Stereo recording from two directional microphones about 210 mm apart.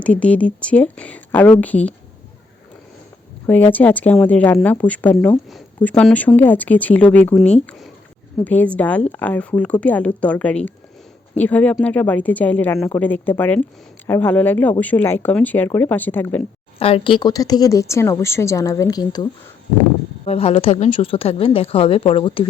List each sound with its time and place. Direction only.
0.0 s speech: 5° left (ahead or behind)
3.4 s speech: 10° left (ahead or behind)
16.7 s a woman's voice: 25° left (ahead or behind)